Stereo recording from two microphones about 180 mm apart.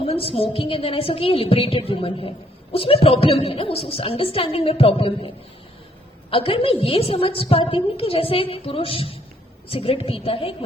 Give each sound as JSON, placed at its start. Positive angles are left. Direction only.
{"t": 0.0, "sound": "a sound", "side_deg": 35}
{"t": 0.3, "sound": "a woman's voice", "side_deg": 30}
{"t": 6.3, "sound": "a woman's voice", "side_deg": 30}